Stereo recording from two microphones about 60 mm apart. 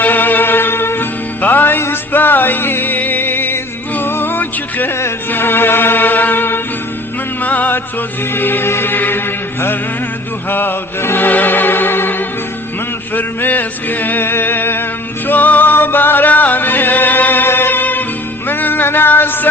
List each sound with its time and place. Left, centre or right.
0.0 s music: left
13.1 s music: left